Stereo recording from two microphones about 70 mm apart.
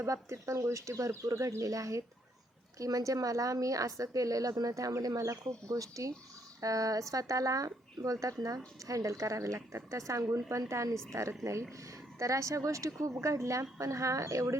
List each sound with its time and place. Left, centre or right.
0.0 s a woman's voice: right